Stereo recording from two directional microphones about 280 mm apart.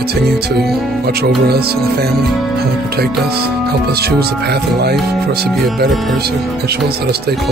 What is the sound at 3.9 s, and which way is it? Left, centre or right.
Speech, right.